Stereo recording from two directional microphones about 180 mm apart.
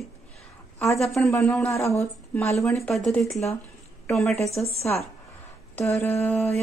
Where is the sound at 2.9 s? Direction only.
Centre (ahead or behind).